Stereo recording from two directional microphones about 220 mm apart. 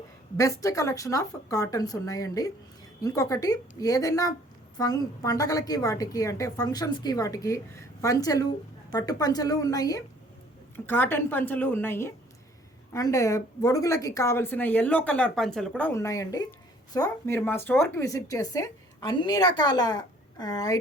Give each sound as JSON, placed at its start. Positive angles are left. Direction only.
{"t": 0.3, "sound": "a woman's voice", "side_deg": 15}